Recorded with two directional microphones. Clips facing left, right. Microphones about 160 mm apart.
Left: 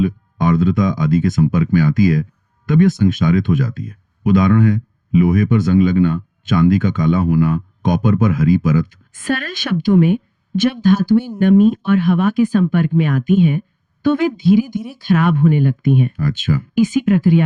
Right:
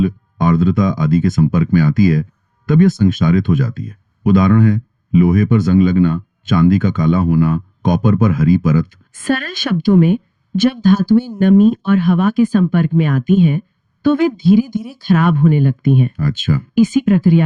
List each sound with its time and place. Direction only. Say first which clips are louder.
0.0 s speech: right 1 dB; 40° right (ahead or behind)
14.6 s speech: right 2 dB; centre (ahead or behind)
15.1 s speech: right 1 dB; 40° right (ahead or behind)